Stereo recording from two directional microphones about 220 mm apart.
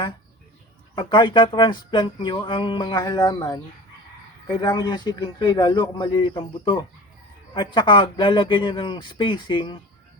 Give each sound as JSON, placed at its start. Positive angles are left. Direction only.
{"t": 0.9, "sound": "speech", "side_deg": 20}